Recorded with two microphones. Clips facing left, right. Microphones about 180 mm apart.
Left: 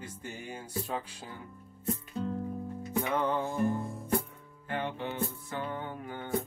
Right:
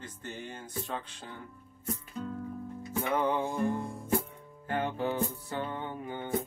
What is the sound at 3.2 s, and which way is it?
Music, 15° right (ahead or behind).